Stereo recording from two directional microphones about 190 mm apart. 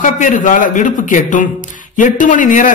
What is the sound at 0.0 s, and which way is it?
A man's voice, 40° left (ahead or behind).